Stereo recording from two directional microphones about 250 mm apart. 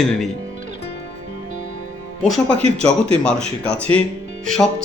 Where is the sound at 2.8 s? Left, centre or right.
Centre.